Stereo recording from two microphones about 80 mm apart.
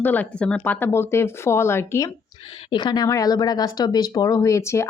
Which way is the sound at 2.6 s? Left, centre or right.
Left.